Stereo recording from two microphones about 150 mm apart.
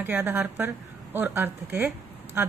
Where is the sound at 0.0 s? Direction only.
15° right (ahead or behind).